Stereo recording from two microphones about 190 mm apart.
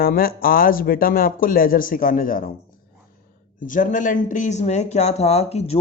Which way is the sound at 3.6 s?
45° left (ahead or behind).